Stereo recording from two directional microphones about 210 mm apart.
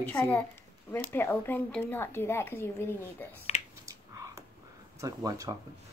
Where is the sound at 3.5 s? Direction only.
35° left (ahead or behind).